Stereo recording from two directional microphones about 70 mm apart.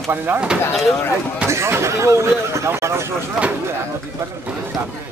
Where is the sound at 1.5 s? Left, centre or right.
Right.